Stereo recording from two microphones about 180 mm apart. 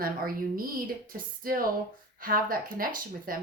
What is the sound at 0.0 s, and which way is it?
Speech, 55° right (ahead or behind).